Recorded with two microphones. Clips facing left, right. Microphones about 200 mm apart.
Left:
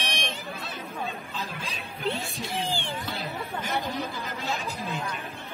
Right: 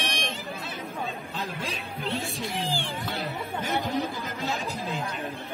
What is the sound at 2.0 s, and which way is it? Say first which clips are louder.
Music: left 1 dB; centre (ahead or behind).